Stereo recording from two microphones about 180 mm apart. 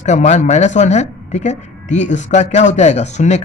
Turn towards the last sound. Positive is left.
turn(degrees=40)  # may be behind; listen again after turning